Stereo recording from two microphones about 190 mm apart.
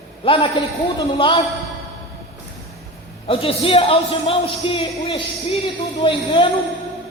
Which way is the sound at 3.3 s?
30° left (ahead or behind).